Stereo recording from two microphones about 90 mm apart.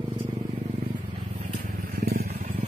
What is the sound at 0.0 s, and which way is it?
Vehicle, 90° right.